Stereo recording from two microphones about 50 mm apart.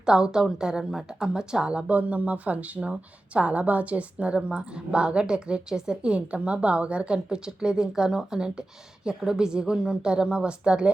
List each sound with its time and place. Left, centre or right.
0.0 s a woman's voice: centre